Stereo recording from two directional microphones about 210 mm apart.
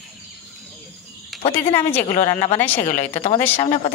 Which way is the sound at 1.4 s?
25° left (ahead or behind).